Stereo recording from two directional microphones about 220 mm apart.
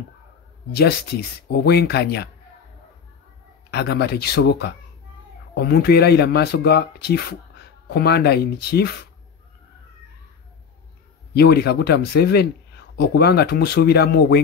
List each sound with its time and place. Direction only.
0.7 s speech: 45° left (ahead or behind)
3.7 s speech: 50° left (ahead or behind)
11.3 s speech: 45° left (ahead or behind)